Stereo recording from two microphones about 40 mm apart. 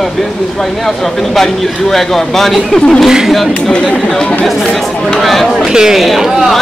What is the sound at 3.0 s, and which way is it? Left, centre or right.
Speech, centre.